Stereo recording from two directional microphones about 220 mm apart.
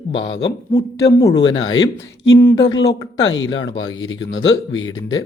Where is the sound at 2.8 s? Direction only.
60° left (ahead or behind).